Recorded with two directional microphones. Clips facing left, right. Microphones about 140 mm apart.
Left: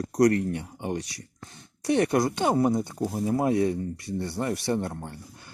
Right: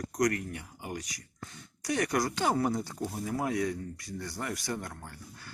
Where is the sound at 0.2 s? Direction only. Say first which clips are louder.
Left 8 dB; 30° left (ahead or behind).